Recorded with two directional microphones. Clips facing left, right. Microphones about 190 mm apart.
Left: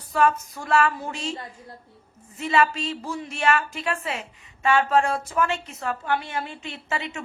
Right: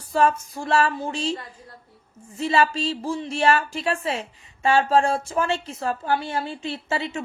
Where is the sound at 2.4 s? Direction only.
30° right (ahead or behind).